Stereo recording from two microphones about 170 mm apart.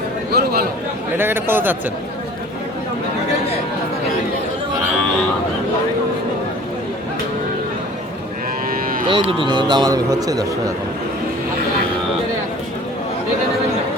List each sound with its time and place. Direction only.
0.3 s a man's voice: 65° right (ahead or behind)
1.1 s a man's voice: 10° right (ahead or behind)
8.7 s moo: 55° right (ahead or behind)
9.0 s a man's voice: 30° right (ahead or behind)